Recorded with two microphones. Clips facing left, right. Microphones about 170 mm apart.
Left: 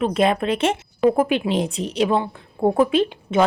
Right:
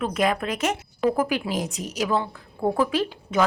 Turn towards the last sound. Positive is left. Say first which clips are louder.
# left 5 dB
turn(degrees=25)  # may be behind; listen again after turning